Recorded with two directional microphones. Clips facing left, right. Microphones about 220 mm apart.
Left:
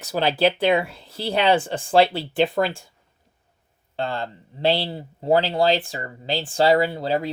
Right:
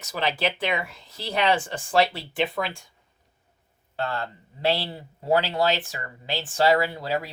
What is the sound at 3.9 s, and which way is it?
Speech, 30° left (ahead or behind).